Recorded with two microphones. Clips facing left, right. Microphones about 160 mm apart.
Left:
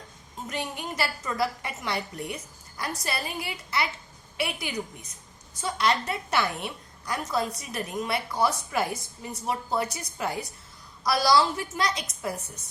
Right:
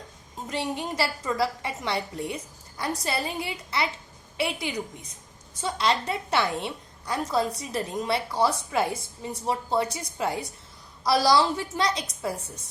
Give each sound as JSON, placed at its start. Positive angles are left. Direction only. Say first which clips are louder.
{"t": 0.4, "sound": "a woman's voice", "louder": "right 4 dB", "side_deg": -30}
{"t": 5.5, "sound": "a woman's voice", "louder": "even", "side_deg": -25}